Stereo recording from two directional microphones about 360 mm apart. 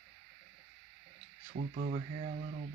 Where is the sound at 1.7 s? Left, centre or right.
Right.